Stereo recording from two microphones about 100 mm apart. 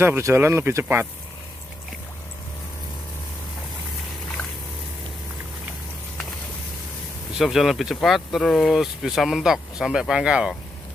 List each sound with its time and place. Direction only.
0.0 s speech: 25° right (ahead or behind)
7.3 s speech: centre (ahead or behind)